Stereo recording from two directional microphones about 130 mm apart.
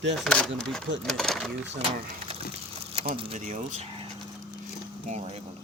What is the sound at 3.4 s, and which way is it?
Speech, 70° right (ahead or behind).